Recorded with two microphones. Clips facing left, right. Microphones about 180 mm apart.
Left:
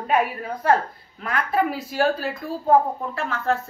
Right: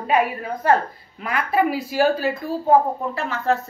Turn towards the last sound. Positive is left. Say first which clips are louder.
# right 2 dB
turn(degrees=-5)  # may be behind; listen again after turning